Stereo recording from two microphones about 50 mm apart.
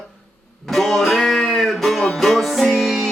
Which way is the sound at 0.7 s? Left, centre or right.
Centre.